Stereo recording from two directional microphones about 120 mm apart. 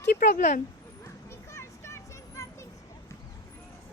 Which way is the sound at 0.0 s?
90° left.